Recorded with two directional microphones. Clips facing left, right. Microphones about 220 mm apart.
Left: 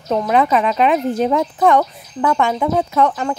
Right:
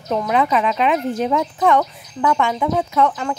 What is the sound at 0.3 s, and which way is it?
Speech, 40° left (ahead or behind).